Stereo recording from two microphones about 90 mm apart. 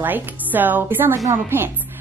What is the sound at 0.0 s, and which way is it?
A woman's voice, 20° right (ahead or behind).